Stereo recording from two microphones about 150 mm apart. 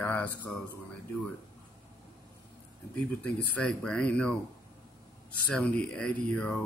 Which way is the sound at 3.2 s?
5° left (ahead or behind).